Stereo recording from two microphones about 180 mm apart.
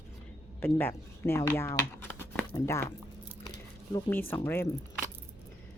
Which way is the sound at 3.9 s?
15° left (ahead or behind).